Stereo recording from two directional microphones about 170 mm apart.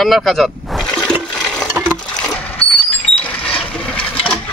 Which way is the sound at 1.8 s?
15° right (ahead or behind).